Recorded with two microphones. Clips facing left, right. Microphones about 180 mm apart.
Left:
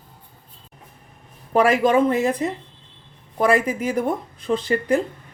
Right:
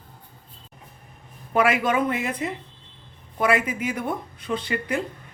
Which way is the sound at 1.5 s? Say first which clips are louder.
Left 5 dB; 35° left (ahead or behind).